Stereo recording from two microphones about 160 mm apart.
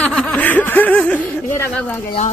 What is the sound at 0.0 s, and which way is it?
Snicker, 5° left (ahead or behind).